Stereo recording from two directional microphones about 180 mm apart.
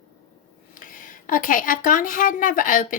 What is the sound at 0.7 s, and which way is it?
Speech, 50° left (ahead or behind).